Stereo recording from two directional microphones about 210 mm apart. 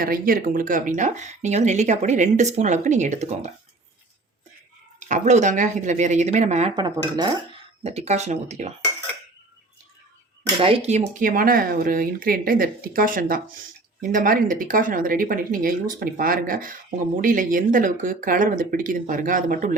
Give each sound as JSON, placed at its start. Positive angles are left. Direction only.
{"t": 0.0, "sound": "speech", "side_deg": -45}
{"t": 4.9, "sound": "speech", "side_deg": -35}
{"t": 6.7, "sound": "speech", "side_deg": -20}
{"t": 7.9, "sound": "speech", "side_deg": -30}
{"t": 10.6, "sound": "speech", "side_deg": -30}